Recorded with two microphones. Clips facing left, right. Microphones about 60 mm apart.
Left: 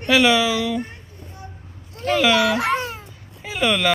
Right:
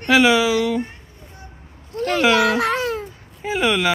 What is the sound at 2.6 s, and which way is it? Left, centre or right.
Babbling, right.